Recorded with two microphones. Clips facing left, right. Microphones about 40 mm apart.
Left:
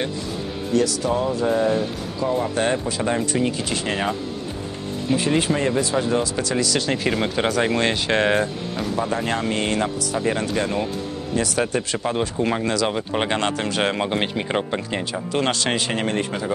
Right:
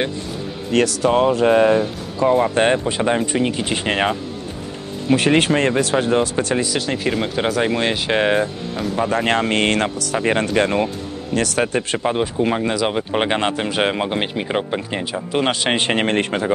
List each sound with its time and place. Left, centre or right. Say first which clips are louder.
0.7 s speech: right 5 dB; right
2.1 s speech: right 7 dB; right
5.6 s speech: right 3 dB; right
6.8 s speech: right 1 dB; centre
9.1 s speech: right 5 dB; right
11.3 s speech: right 3 dB; right
11.6 s speech: right 3 dB; right
12.4 s speech: right 2 dB; centre
15.7 s speech: right 5 dB; right